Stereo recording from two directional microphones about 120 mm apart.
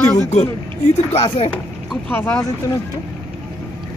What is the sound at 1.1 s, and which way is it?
Speech, 55° left (ahead or behind).